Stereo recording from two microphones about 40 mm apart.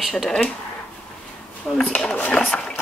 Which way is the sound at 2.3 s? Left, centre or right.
Left.